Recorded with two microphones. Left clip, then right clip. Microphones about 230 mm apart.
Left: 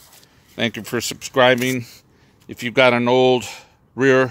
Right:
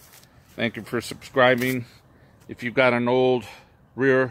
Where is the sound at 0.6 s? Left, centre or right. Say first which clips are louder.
Left 4 dB; left.